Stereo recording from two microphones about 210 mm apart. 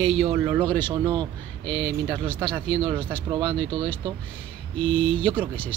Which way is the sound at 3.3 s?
20° right (ahead or behind).